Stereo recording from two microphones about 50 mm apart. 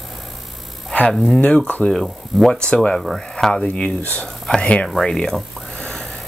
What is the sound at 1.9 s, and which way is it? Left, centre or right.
Speech, centre.